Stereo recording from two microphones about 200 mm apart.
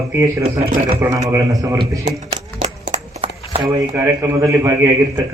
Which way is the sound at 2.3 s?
25° right (ahead or behind).